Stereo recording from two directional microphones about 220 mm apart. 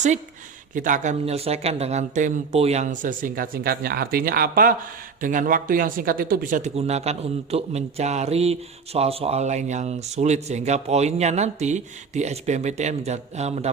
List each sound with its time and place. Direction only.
0.7 s speech: 35° right (ahead or behind)